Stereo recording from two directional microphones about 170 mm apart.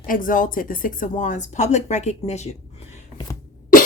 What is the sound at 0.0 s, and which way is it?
Speech, 55° left (ahead or behind).